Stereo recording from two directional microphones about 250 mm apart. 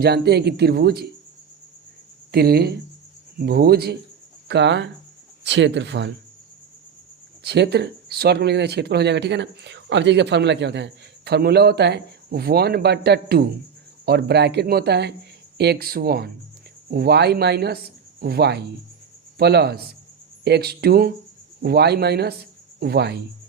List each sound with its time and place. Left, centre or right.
0.0 s speech: right
2.3 s speech: right
7.4 s speech: right